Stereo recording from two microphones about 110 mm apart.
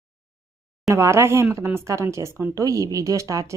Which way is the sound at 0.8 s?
25° right (ahead or behind).